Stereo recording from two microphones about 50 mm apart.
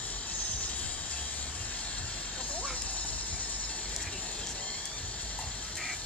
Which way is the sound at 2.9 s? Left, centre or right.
Left.